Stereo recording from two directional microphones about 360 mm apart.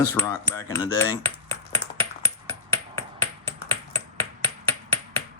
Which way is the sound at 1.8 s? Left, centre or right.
Right.